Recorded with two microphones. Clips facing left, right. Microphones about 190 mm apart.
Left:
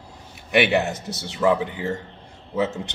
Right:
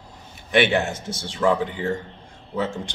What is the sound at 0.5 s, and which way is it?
Speech, centre (ahead or behind).